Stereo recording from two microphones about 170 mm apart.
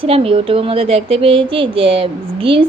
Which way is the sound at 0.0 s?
35° right (ahead or behind).